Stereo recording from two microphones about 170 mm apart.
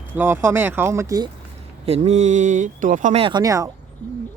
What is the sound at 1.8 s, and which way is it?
Speech, 40° right (ahead or behind).